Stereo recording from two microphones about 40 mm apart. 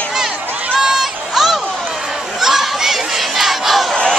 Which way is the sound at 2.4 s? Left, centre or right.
Centre.